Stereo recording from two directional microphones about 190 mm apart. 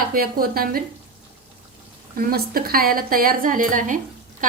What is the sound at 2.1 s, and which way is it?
A woman's voice, 50° right (ahead or behind).